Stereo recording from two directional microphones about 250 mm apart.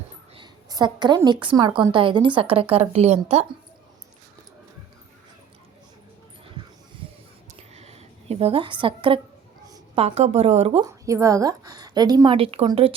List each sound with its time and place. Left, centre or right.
0.3 s a woman's voice: centre
7.7 s a sound: right
9.6 s a woman's voice: centre
10.8 s a woman's voice: centre